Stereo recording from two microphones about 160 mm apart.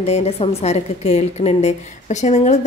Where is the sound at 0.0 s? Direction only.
40° left (ahead or behind).